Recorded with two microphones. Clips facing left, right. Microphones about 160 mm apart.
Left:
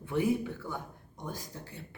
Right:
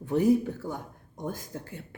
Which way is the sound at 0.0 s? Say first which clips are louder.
Right 6 dB; 40° right (ahead or behind).